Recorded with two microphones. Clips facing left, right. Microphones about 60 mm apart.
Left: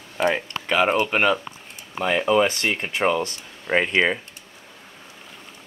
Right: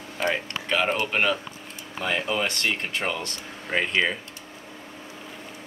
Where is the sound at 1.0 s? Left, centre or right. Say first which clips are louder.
Left 4 dB; centre; by 4.2 s left.